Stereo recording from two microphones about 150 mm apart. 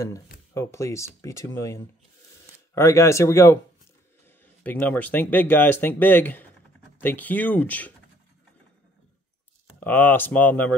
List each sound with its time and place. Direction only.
0.0 s speech: 20° left (ahead or behind)
4.6 s speech: 10° left (ahead or behind)
9.8 s speech: 10° left (ahead or behind)